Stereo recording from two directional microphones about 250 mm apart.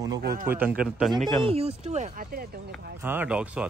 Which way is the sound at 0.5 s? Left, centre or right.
Centre.